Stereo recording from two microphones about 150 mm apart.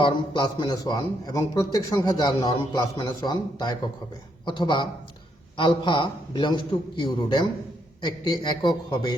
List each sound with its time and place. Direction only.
0.0 s a man's voice: 30° left (ahead or behind)